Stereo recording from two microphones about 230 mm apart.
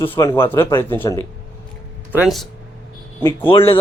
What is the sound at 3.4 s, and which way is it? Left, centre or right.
Speech, left.